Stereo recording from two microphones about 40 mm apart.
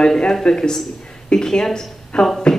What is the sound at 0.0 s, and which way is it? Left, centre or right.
A woman's voice, centre.